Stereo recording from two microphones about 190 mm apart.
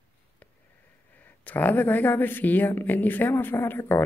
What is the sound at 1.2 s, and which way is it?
Speech, 10° left (ahead or behind).